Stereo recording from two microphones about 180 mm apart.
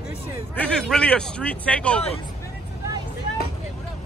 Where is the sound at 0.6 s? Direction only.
5° left (ahead or behind).